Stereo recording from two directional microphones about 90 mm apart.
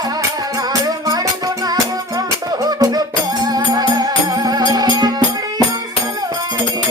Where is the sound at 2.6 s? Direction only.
45° right (ahead or behind).